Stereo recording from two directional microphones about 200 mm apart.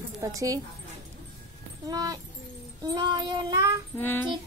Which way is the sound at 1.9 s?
20° right (ahead or behind).